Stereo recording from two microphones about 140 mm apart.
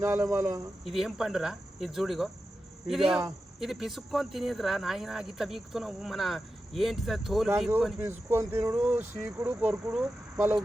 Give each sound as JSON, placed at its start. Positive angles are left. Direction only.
{"t": 0.0, "sound": "speech", "side_deg": -15}
{"t": 0.9, "sound": "speech", "side_deg": 0}
{"t": 7.9, "sound": "speech", "side_deg": -15}